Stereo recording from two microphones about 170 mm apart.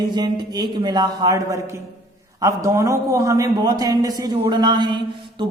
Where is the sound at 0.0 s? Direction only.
25° right (ahead or behind).